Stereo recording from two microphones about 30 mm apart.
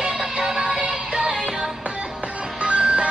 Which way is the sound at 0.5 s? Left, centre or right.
Right.